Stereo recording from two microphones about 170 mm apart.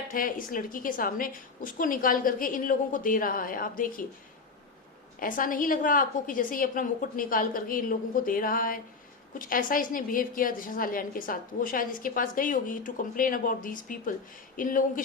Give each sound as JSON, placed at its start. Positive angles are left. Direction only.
{"t": 0.1, "sound": "a woman's voice", "side_deg": 55}
{"t": 5.2, "sound": "a woman's voice", "side_deg": 55}